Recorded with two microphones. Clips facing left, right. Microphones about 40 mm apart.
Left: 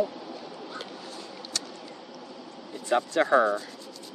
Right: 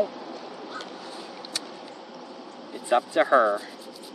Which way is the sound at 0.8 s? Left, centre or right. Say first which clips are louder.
Right 2 dB; centre.